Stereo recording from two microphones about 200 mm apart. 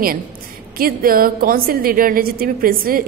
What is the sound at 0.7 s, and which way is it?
A woman's voice, 45° right (ahead or behind).